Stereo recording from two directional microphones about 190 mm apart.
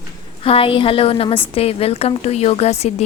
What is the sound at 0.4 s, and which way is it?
A woman's voice, 30° left (ahead or behind).